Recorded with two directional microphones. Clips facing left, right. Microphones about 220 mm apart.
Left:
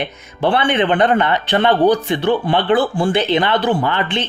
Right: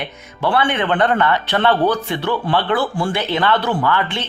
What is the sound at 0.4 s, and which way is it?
A man's voice, 20° left (ahead or behind).